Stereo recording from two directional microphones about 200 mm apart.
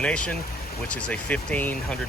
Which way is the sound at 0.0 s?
5° left (ahead or behind).